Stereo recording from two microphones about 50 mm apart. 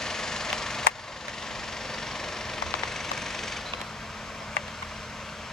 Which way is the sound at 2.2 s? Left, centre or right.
Centre.